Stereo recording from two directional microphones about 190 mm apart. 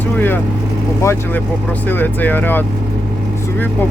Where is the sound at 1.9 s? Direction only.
10° left (ahead or behind).